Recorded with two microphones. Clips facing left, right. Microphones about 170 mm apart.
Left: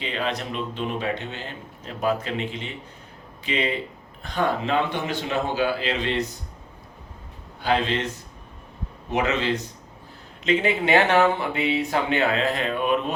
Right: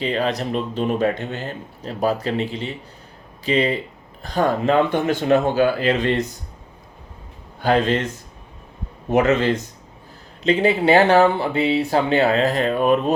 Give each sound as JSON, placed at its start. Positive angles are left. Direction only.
{"t": 0.0, "sound": "a man's voice", "side_deg": -40}
{"t": 7.6, "sound": "a man's voice", "side_deg": -45}
{"t": 9.0, "sound": "a man's voice", "side_deg": -50}
{"t": 10.4, "sound": "speech", "side_deg": -35}